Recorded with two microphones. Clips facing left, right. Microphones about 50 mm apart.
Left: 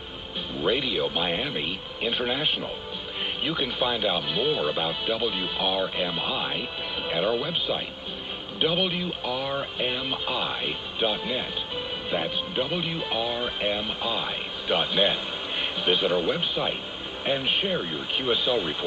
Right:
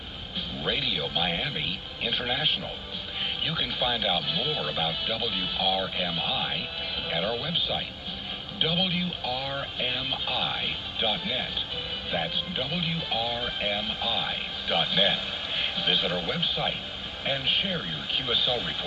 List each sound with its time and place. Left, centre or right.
0.7 s speech: centre